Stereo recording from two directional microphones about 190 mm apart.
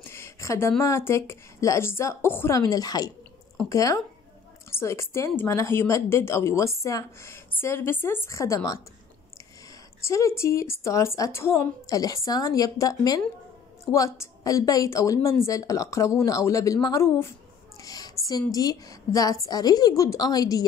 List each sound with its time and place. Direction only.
0.0 s a woman's voice: 15° left (ahead or behind)
10.0 s a woman's voice: 15° left (ahead or behind)
17.8 s a sound: 20° left (ahead or behind)
18.5 s a woman's voice: 20° left (ahead or behind)